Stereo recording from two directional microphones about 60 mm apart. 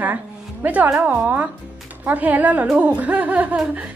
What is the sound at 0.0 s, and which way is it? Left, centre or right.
A woman's voice, right.